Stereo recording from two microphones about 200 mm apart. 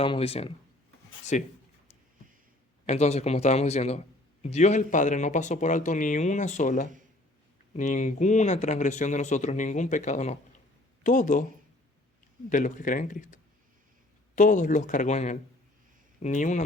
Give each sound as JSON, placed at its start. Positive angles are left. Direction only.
{"t": 0.0, "sound": "speech", "side_deg": 30}
{"t": 2.8, "sound": "speech", "side_deg": 35}
{"t": 12.5, "sound": "speech", "side_deg": 40}